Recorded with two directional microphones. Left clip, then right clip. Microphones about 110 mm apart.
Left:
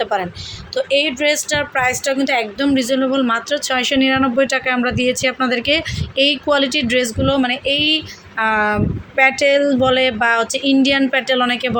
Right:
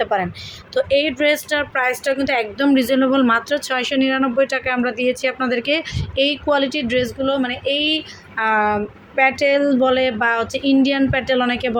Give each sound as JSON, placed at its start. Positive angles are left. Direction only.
{"t": 0.0, "sound": "speech", "side_deg": -20}
{"t": 1.5, "sound": "a woman's voice", "side_deg": -10}
{"t": 2.7, "sound": "speech", "side_deg": -30}
{"t": 3.7, "sound": "speech", "side_deg": -5}